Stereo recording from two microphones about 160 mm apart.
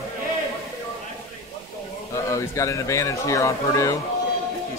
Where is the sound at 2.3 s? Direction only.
20° left (ahead or behind).